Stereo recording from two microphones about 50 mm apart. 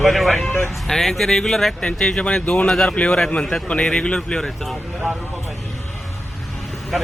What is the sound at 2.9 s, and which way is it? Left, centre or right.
A man's voice, left.